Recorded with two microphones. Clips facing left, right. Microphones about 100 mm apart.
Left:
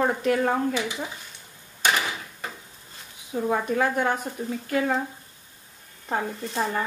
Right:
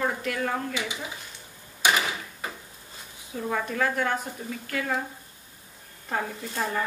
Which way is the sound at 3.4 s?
25° left (ahead or behind).